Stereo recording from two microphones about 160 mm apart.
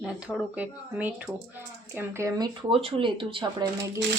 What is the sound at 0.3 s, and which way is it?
Speech, 10° right (ahead or behind).